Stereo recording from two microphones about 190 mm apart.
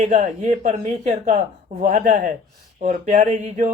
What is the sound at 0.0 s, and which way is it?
Speech, 35° right (ahead or behind).